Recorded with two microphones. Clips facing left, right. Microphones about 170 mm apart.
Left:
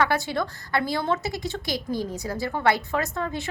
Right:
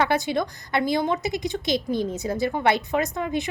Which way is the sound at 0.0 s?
20° right (ahead or behind).